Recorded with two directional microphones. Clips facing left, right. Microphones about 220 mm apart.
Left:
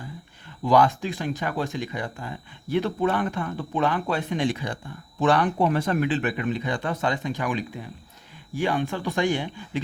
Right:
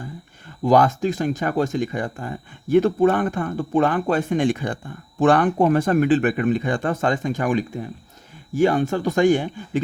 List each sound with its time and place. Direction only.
0.6 s speech: 45° right (ahead or behind)